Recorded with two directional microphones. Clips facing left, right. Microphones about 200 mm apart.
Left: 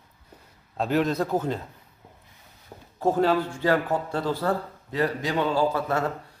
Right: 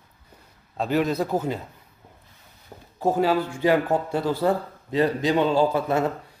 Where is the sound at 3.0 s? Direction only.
5° right (ahead or behind).